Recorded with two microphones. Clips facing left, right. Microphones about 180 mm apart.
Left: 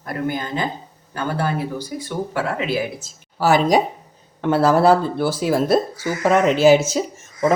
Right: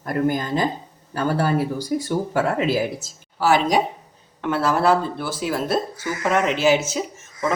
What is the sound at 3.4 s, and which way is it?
Speech, 40° left (ahead or behind).